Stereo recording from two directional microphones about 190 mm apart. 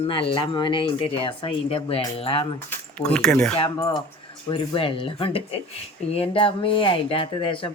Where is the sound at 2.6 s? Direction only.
5° left (ahead or behind).